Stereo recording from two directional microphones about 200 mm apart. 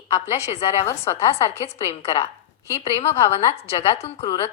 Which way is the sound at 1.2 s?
30° left (ahead or behind).